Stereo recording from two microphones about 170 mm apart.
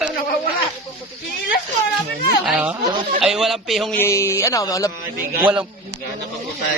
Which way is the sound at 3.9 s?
15° left (ahead or behind).